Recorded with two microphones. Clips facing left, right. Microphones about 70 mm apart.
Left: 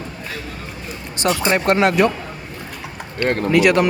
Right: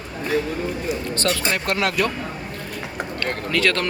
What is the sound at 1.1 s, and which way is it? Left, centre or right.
Speech, centre.